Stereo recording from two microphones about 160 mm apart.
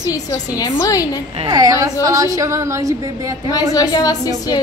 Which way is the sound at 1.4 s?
25° right (ahead or behind).